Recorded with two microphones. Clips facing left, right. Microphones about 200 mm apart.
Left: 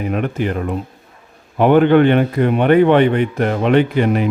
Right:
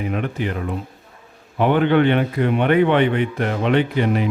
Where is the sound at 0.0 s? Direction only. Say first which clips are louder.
Left 4 dB; 50° left (ahead or behind).